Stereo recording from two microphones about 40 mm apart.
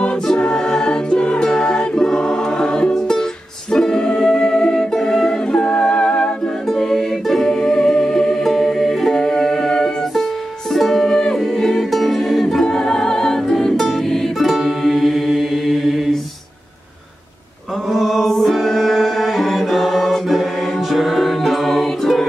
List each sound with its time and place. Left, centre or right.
0.0 s music: left
5.5 s music: left
6.7 s music: centre
9.1 s music: centre
12.6 s music: centre
14.4 s music: centre
17.8 s music: centre